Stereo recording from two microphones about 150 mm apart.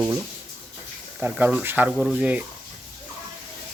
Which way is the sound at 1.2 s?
10° right (ahead or behind).